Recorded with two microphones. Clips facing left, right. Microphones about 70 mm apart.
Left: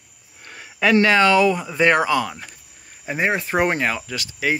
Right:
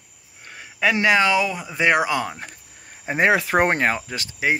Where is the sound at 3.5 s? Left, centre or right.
Right.